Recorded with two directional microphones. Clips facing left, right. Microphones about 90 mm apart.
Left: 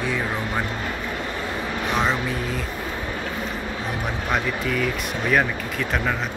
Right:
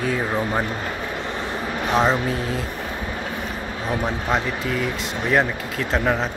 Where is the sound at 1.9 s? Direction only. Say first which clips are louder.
Right 4 dB; 35° right (ahead or behind).